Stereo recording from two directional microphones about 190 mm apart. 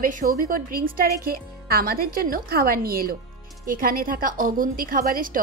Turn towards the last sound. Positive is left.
turn(degrees=-50)  # may be behind; listen again after turning